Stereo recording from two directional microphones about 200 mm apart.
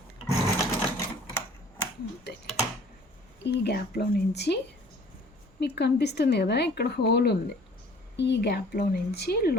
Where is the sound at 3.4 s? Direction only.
55° left (ahead or behind).